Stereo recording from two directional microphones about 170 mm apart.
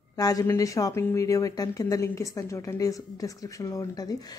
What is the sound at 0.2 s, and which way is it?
Speech, 20° left (ahead or behind).